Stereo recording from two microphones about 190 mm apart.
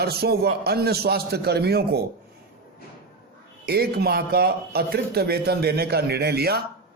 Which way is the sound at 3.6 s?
55° right (ahead or behind).